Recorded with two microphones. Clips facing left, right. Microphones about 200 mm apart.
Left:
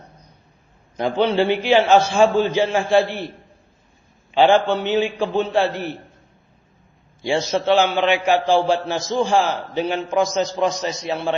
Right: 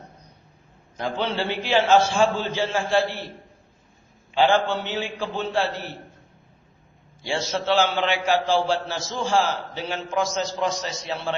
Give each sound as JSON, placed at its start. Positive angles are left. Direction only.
{"t": 1.2, "sound": "a man's voice", "side_deg": 15}
{"t": 4.4, "sound": "a man's voice", "side_deg": 15}
{"t": 7.3, "sound": "a man's voice", "side_deg": 15}